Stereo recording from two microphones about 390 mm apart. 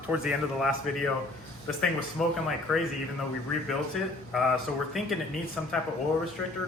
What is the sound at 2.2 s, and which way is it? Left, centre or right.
Speech, centre.